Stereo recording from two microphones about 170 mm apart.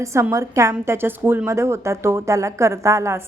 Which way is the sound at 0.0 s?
15° right (ahead or behind).